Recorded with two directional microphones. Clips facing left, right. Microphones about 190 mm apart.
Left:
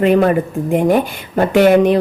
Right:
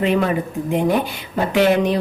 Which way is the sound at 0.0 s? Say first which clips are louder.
Left 6 dB; 50° left (ahead or behind).